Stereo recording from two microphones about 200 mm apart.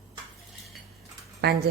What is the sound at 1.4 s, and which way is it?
Speech, 50° right (ahead or behind).